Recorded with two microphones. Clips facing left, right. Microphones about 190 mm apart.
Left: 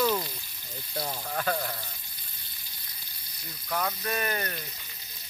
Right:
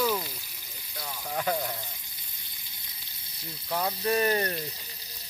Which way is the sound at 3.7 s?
30° right (ahead or behind).